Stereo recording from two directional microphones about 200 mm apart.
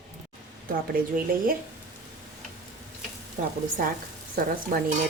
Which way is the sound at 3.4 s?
40° right (ahead or behind).